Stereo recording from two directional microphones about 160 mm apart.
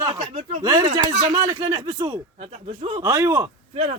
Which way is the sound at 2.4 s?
40° right (ahead or behind).